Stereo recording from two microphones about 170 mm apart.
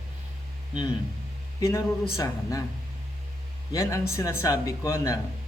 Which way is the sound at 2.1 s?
20° left (ahead or behind).